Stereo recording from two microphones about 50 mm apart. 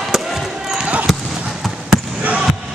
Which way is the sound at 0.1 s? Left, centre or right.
Centre.